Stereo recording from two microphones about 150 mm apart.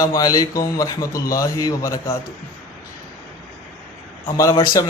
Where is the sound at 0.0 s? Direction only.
25° left (ahead or behind).